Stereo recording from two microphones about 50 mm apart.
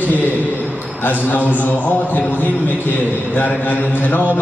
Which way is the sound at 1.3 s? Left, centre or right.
Left.